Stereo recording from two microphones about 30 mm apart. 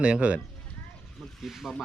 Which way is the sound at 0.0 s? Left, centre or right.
Right.